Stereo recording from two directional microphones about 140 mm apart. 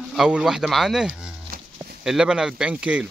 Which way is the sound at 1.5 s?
90° right.